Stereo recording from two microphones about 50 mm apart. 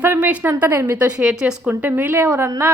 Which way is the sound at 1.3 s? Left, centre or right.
Centre.